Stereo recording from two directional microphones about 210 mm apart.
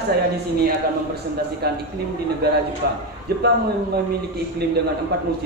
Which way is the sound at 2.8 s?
50° right (ahead or behind).